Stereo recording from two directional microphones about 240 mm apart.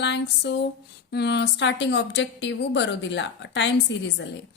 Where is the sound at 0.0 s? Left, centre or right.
Left.